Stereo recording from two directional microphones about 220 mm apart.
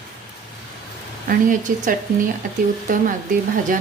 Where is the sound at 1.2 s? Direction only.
35° right (ahead or behind).